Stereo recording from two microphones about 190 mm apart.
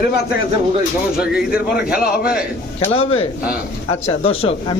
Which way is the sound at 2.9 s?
30° left (ahead or behind).